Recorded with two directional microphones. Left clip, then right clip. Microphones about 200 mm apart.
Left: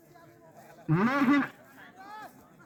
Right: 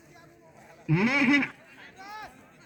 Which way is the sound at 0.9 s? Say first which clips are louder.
Right 2 dB; 35° left (ahead or behind).